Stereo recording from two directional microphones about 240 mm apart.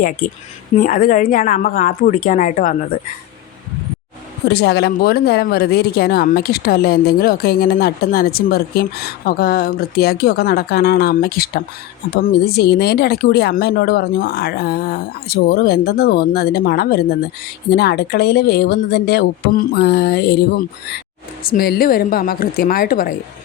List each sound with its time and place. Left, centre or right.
0.8 s speech: left
4.4 s speech: left